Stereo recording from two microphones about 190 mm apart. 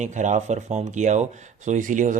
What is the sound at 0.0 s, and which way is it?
Speech, 40° right (ahead or behind).